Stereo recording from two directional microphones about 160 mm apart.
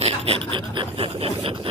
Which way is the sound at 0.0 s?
35° right (ahead or behind).